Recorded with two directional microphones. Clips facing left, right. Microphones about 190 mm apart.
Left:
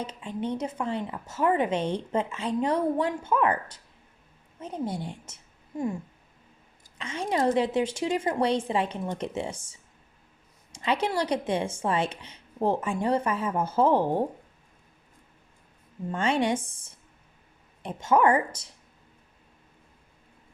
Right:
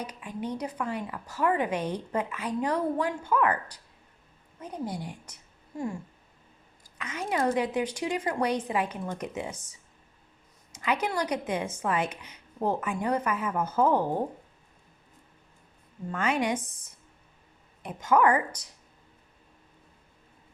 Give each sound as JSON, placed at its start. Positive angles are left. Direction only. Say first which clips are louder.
{"t": 0.0, "sound": "a woman's voice", "louder": "left 3 dB", "side_deg": 25}
{"t": 7.0, "sound": "a woman's voice", "louder": "left 2 dB", "side_deg": 30}
{"t": 16.1, "sound": "a woman's voice", "louder": "left 2 dB", "side_deg": 30}